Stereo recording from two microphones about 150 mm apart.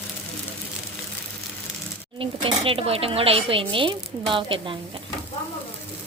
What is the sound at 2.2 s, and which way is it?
Speech, 35° right (ahead or behind).